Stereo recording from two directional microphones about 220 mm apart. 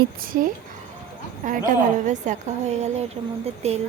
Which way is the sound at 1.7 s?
35° right (ahead or behind).